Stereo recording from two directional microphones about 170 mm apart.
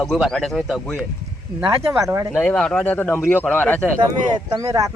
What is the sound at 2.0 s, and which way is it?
Speech, 20° right (ahead or behind).